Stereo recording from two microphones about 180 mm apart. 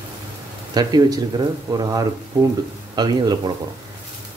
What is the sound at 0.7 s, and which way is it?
Speech, 20° right (ahead or behind).